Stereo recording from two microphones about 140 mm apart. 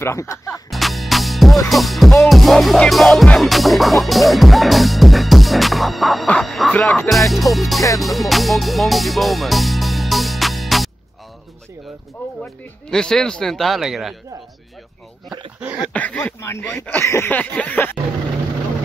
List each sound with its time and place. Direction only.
0.0 s speech: 20° left (ahead or behind)
0.7 s music: centre (ahead or behind)
6.7 s speech: 15° left (ahead or behind)
7.1 s music: centre (ahead or behind)
12.2 s speech: 15° left (ahead or behind)
12.9 s music: 5° left (ahead or behind)
15.6 s a sound: 10° right (ahead or behind)
15.9 s speech: 10° left (ahead or behind)